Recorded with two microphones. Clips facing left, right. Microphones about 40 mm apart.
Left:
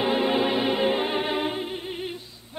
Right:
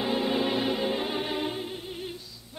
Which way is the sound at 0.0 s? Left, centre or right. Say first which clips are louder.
Left 4 dB; left.